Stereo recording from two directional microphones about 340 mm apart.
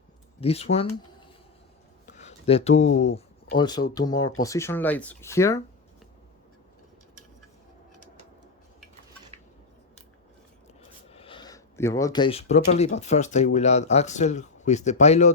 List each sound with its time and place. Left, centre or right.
0.3 s speech: centre
2.0 s a sound: centre
3.0 s speech: centre
11.1 s speech: centre